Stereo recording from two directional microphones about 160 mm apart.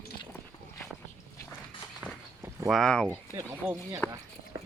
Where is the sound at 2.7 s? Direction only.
5° left (ahead or behind).